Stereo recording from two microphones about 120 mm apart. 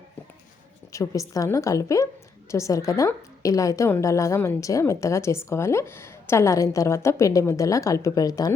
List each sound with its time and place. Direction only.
0.9 s a woman's voice: 25° left (ahead or behind)